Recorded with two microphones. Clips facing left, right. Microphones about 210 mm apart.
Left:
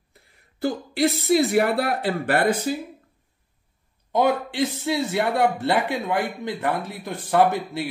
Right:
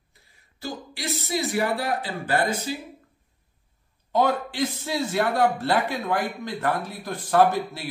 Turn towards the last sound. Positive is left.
turn(degrees=20)  # may be behind; listen again after turning